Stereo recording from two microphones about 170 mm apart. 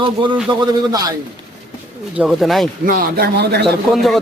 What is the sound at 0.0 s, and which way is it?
Speech, 30° right (ahead or behind).